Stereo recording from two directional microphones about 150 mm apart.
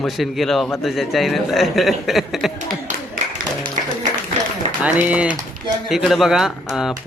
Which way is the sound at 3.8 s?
55° right (ahead or behind).